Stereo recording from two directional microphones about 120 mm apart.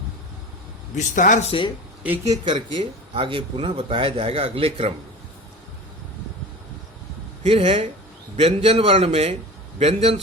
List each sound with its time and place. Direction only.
0.9 s a man's voice: 90° left
2.2 s speech: 30° right (ahead or behind)
2.7 s speech: 40° right (ahead or behind)
7.4 s a man's voice: 60° right (ahead or behind)